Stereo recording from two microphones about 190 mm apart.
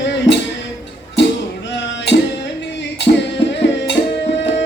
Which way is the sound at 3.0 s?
70° left (ahead or behind).